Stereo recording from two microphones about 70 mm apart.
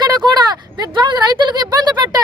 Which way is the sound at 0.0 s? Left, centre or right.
Right.